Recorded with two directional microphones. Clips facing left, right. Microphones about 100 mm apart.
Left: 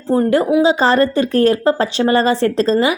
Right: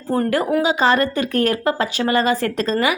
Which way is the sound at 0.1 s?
20° left (ahead or behind).